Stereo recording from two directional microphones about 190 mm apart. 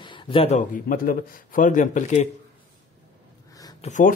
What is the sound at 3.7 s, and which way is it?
Speech, 40° left (ahead or behind).